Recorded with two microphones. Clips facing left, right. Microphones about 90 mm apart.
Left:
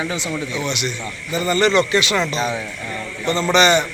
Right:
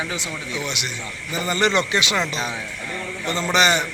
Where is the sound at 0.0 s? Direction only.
5° right (ahead or behind).